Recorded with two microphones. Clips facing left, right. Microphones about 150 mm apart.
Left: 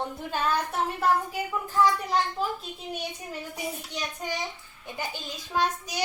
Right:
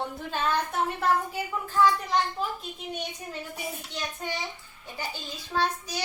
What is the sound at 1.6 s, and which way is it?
Hands, 15° left (ahead or behind).